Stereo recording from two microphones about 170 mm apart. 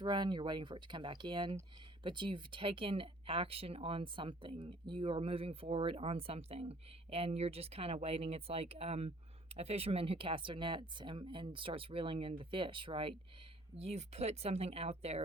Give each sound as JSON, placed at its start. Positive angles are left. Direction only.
{"t": 0.0, "sound": "speech", "side_deg": -25}